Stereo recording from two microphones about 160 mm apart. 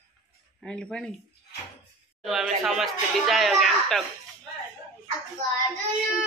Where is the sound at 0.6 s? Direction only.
5° left (ahead or behind).